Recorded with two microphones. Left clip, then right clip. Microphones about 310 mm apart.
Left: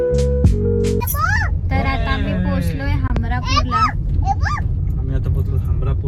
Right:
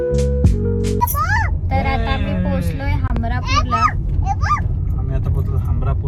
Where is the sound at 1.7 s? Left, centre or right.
Centre.